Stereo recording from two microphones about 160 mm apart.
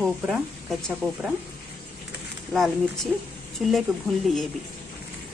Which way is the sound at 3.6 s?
Centre (ahead or behind).